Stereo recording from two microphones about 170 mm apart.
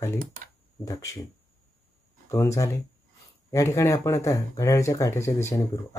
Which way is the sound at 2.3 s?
15° left (ahead or behind).